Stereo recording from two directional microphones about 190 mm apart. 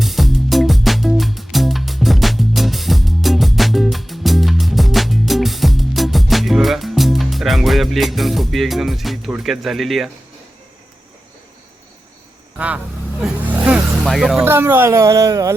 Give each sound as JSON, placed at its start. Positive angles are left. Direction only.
{"t": 0.0, "sound": "music", "side_deg": 0}
{"t": 12.5, "sound": "vehicle", "side_deg": -5}
{"t": 14.5, "sound": "speech", "side_deg": -10}